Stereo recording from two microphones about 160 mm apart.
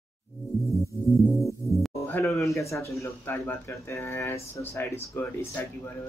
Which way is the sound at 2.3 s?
20° left (ahead or behind).